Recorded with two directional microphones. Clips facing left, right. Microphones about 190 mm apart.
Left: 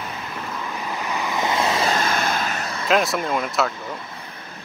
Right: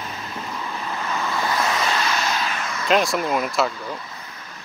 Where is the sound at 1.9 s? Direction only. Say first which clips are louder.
Left 2 dB; 50° left (ahead or behind).